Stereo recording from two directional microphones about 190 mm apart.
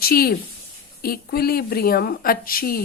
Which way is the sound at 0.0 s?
55° left (ahead or behind).